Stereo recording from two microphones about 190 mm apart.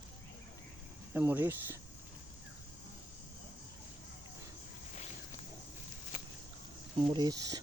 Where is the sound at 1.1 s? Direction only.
10° right (ahead or behind).